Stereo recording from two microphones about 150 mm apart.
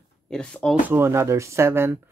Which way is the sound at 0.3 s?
10° left (ahead or behind).